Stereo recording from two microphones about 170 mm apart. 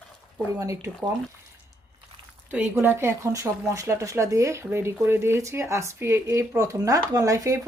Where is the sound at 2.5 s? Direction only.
10° right (ahead or behind).